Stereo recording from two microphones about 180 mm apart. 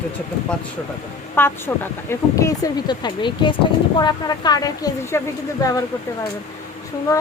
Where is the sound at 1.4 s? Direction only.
10° left (ahead or behind).